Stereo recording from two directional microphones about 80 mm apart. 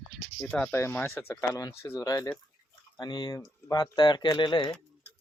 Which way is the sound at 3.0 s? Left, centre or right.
Left.